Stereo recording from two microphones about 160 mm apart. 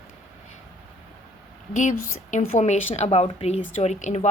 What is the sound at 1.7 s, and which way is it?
A woman's voice, 50° left (ahead or behind).